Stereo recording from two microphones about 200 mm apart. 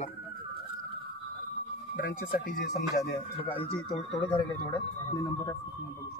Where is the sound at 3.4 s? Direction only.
25° left (ahead or behind).